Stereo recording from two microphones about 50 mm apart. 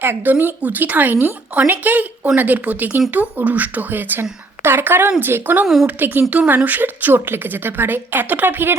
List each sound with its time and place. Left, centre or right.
0.0 s speech: right